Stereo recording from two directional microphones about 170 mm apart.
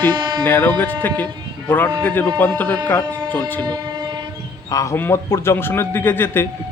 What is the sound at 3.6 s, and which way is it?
Train, 25° right (ahead or behind).